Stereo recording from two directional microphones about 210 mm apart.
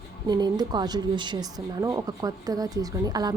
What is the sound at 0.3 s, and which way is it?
Speech, 20° right (ahead or behind).